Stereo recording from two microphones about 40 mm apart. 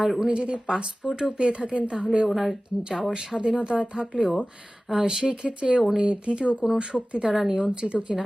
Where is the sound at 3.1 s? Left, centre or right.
Centre.